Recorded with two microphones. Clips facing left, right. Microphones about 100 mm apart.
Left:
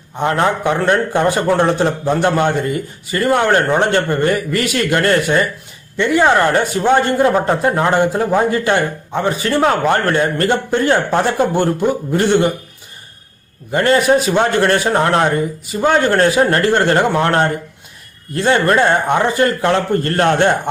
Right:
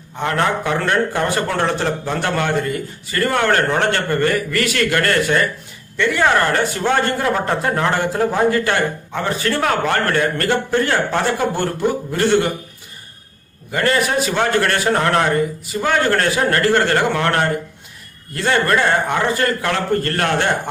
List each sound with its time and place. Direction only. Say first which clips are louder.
0.2 s a man's voice: left 3 dB; 20° left (ahead or behind)
13.7 s a man's voice: left 5 dB; 25° left (ahead or behind)